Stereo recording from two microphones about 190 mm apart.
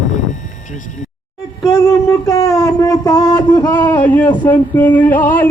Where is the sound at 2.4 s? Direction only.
20° left (ahead or behind).